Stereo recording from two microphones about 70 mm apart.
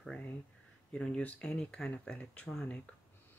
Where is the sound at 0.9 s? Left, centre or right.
Centre.